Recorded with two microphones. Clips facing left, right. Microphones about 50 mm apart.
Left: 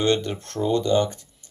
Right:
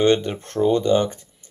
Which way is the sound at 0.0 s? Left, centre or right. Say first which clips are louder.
Right 4 dB; centre.